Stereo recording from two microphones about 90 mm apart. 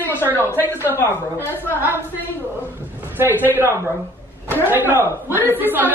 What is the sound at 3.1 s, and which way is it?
A man's voice, 20° right (ahead or behind).